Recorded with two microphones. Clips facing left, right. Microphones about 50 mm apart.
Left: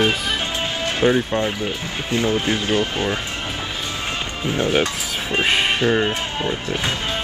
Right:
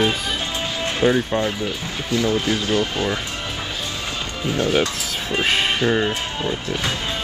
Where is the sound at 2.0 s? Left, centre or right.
Left.